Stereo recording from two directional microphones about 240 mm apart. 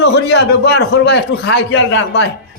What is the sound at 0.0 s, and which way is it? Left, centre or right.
Speech, left.